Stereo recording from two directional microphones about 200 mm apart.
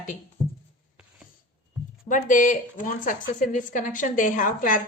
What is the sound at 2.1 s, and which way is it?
Speech, 40° left (ahead or behind).